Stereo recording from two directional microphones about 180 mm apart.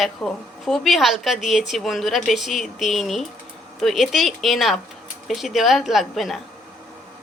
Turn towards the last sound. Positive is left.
turn(degrees=0)  # may be behind; listen again after turning